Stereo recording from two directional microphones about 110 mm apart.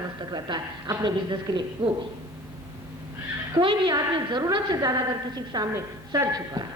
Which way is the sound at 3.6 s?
45° right (ahead or behind).